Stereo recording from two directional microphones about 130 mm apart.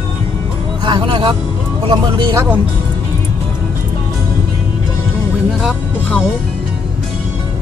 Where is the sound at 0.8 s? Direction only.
40° right (ahead or behind).